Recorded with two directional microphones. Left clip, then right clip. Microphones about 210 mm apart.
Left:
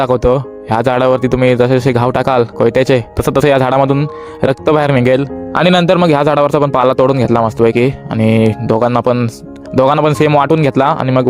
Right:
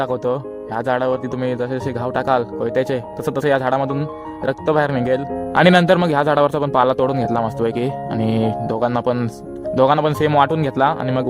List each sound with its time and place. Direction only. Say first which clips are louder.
0.0 s speech: left 9 dB; 35° left (ahead or behind)
5.5 s speech: left 3 dB; 20° left (ahead or behind)